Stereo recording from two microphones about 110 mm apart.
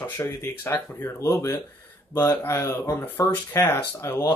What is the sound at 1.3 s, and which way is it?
Speech, 30° left (ahead or behind).